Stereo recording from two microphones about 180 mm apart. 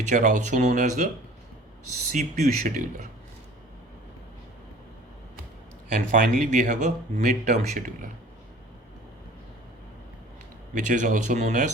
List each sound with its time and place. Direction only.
0.0 s speech: 45° right (ahead or behind)
2.1 s speech: 40° right (ahead or behind)
6.1 s speech: 45° right (ahead or behind)
10.8 s speech: 45° right (ahead or behind)